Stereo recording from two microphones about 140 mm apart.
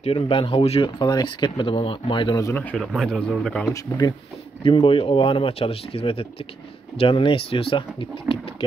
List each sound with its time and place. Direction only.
0.0 s speech: 40° left (ahead or behind)
2.4 s speech: 10° left (ahead or behind)
3.7 s speech: 25° left (ahead or behind)
4.6 s speech: 40° left (ahead or behind)